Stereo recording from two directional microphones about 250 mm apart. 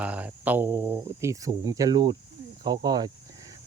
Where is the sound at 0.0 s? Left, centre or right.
Centre.